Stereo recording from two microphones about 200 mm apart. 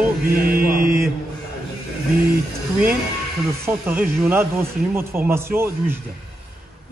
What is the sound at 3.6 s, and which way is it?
A man's voice, 10° right (ahead or behind).